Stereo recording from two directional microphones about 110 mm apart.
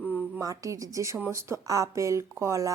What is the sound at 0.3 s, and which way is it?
Speech, 30° right (ahead or behind).